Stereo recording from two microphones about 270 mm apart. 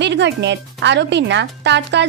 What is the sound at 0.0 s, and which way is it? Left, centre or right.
Speech, right.